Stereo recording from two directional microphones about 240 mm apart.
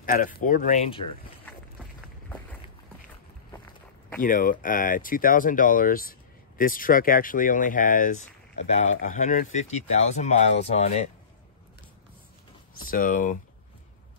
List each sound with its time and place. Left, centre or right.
0.0 s speech: left
4.2 s speech: left
12.7 s speech: left